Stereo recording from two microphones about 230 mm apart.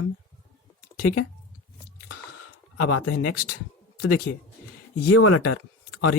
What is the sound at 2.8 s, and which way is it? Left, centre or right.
Speech, left.